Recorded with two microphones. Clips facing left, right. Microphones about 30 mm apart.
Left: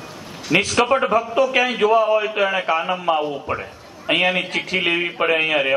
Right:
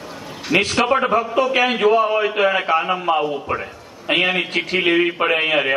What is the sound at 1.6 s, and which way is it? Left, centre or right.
A man's voice, right.